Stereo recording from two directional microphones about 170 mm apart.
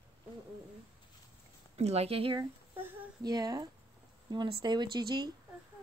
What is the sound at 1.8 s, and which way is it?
A woman's voice, 40° right (ahead or behind).